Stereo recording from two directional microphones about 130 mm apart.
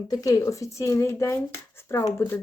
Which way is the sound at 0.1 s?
30° left (ahead or behind).